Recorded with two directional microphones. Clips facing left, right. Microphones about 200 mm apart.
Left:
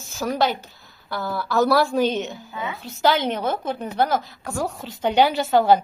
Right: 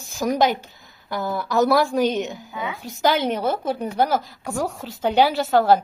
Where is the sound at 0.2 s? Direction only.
15° right (ahead or behind).